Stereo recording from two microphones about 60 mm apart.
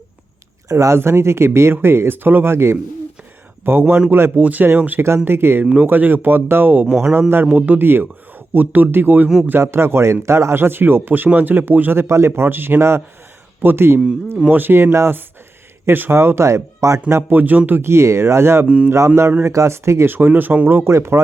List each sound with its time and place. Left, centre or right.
0.7 s speech: right
0.9 s speech: right
4.9 s speech: right
6.8 s a man's voice: centre
7.1 s speech: right
7.4 s a man's voice: right
7.8 s speech: right
9.5 s speech: right
17.3 s a man's voice: right
17.7 s speech: right
18.6 s a man's voice: right
18.9 s speech: right
20.1 s speech: right
20.9 s speech: right